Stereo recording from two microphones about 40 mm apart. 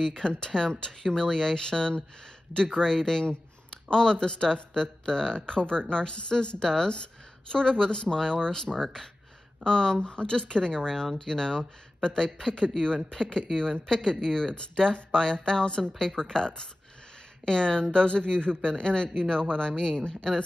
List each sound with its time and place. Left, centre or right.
0.0 s speech: centre